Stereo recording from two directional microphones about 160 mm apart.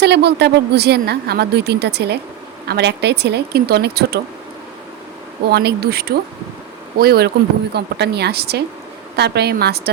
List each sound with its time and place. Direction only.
0.0 s a woman's voice: 90° right
5.5 s a woman's voice: 90° right